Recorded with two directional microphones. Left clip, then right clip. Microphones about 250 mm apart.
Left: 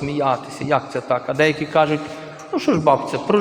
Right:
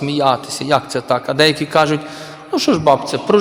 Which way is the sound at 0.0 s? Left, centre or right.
Right.